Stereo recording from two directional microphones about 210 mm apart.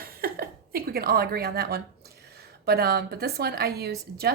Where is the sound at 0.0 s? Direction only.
45° right (ahead or behind).